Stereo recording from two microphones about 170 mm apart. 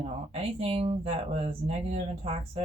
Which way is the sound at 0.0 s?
35° right (ahead or behind).